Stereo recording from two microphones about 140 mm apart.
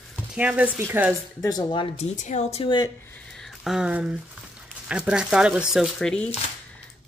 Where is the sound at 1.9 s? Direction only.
55° left (ahead or behind).